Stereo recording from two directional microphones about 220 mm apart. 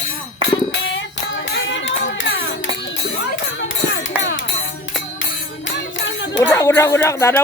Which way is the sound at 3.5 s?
60° left (ahead or behind).